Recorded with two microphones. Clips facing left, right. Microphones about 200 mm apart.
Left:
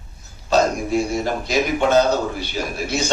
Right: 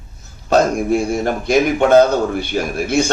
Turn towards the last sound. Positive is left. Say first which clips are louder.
# right 7 dB
turn(degrees=-55)  # may be behind; listen again after turning